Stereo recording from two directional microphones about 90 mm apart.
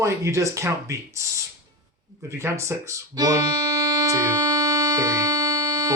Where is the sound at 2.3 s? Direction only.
35° right (ahead or behind).